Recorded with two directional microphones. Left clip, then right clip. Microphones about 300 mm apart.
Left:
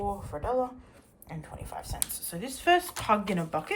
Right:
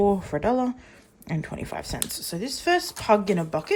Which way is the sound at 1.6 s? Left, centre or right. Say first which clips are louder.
Right 7 dB; centre.